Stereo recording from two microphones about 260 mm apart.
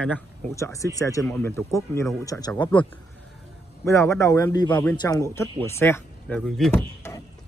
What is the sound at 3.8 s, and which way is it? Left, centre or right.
A man's voice, centre.